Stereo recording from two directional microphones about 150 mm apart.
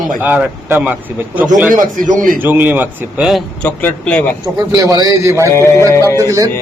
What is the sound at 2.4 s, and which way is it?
A man's voice, 10° right (ahead or behind).